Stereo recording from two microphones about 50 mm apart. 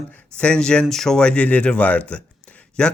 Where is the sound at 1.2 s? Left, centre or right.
Left.